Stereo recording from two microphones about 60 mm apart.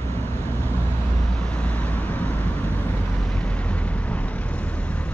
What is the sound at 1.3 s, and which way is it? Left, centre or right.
Vehicle, centre.